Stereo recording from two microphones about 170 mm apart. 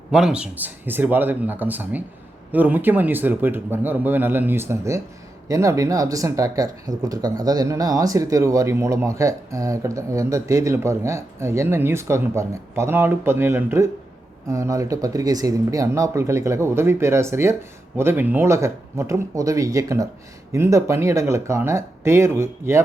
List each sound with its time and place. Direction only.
0.1 s speech: 5° right (ahead or behind)